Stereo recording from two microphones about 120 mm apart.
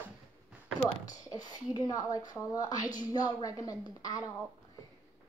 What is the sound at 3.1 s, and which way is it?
A woman's voice, 30° left (ahead or behind).